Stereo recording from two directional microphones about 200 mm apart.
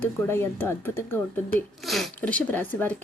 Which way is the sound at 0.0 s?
10° left (ahead or behind).